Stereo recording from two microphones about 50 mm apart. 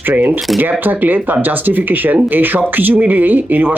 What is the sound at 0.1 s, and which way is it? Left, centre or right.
Speech, right.